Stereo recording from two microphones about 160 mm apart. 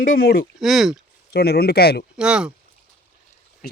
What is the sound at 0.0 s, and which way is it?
Speech, 65° left (ahead or behind).